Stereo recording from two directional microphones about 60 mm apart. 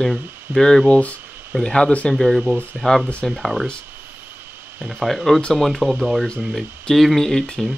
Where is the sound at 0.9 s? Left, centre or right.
Left.